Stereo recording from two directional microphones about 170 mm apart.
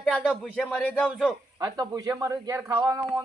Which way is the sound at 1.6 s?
25° right (ahead or behind).